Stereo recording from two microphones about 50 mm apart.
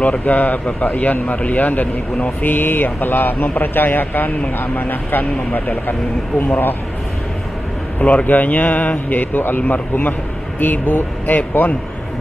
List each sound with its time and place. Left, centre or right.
0.0 s a man's voice: left
2.4 s a man's voice: left
8.0 s a man's voice: left